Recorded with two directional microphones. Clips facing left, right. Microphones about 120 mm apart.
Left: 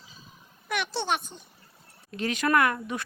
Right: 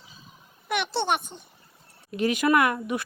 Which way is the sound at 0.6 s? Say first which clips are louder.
Right 3 dB; 15° right (ahead or behind).